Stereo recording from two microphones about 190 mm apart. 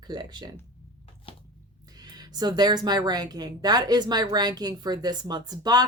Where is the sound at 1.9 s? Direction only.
20° right (ahead or behind).